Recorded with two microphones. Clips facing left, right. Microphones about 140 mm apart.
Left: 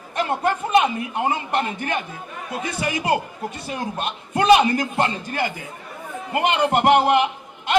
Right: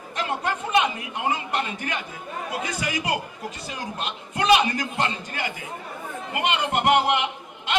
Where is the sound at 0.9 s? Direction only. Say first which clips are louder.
Left 4 dB; 30° left (ahead or behind).